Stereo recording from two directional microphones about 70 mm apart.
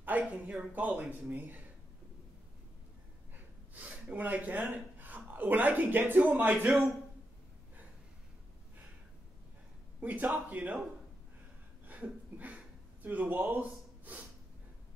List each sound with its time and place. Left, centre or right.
0.2 s a man's voice: centre
3.7 s speech: right
9.9 s a man's voice: right
11.8 s a sound: right